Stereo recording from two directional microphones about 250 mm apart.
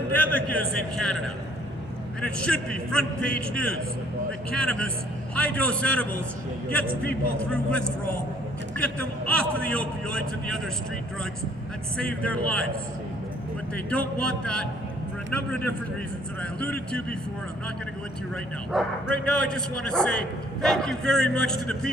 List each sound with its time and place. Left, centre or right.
0.1 s a man's voice: centre
2.2 s a man's voice: centre
7.5 s a man's voice: centre
11.9 s a man's voice: centre
13.7 s a man's voice: centre
18.7 s a man's voice: centre